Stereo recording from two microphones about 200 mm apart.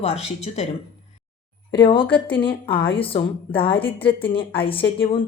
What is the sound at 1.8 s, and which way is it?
A woman's voice, 25° left (ahead or behind).